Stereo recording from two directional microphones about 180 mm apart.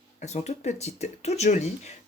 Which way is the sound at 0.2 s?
40° left (ahead or behind).